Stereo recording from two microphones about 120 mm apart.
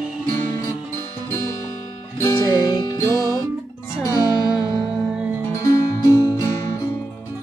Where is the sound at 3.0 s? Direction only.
30° right (ahead or behind).